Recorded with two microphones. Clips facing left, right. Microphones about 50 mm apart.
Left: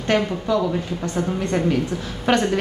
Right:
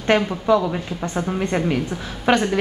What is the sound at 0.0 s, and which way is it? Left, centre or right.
A woman's voice, right.